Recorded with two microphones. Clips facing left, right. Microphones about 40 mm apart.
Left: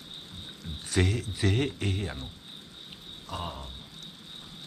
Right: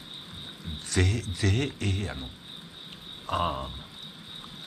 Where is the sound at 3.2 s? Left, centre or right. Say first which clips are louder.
Right 9 dB; right.